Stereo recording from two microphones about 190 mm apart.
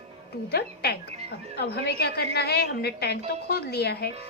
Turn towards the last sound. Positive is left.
turn(degrees=55)  # may be behind; listen again after turning